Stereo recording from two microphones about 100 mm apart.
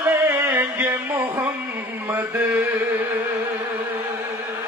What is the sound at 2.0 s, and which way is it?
Mantra, 20° right (ahead or behind).